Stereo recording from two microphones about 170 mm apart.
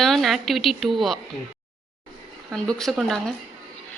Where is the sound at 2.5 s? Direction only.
5° left (ahead or behind).